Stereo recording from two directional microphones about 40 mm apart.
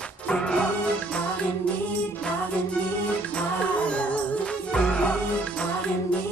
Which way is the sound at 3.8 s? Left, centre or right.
Left.